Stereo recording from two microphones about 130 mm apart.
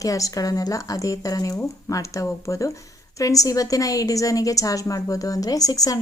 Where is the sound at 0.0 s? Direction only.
25° left (ahead or behind).